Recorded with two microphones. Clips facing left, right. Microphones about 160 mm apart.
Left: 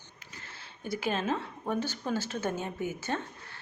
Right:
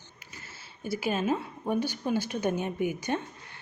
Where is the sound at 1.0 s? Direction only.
10° right (ahead or behind).